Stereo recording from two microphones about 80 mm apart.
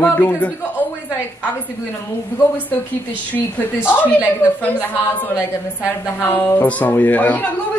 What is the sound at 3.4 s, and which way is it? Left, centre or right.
Speech, left.